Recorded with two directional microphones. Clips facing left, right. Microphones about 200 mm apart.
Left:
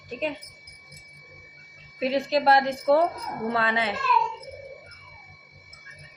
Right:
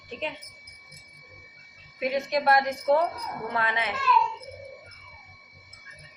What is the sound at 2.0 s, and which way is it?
A woman's voice, 30° left (ahead or behind).